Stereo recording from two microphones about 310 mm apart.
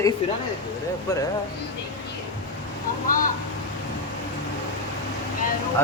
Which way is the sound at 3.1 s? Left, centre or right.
Left.